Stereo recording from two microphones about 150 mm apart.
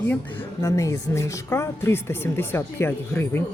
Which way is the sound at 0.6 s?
20° left (ahead or behind).